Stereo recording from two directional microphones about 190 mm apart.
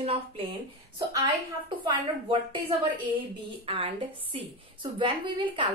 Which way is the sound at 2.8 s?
30° right (ahead or behind).